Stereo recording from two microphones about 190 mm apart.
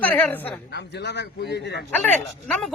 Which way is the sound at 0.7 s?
60° left (ahead or behind).